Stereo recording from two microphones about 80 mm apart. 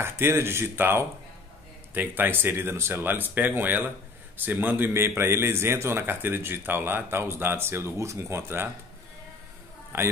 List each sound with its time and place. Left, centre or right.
0.0 s a man's voice: right
9.9 s a man's voice: right